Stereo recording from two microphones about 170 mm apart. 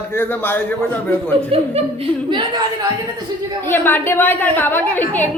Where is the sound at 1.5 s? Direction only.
35° right (ahead or behind).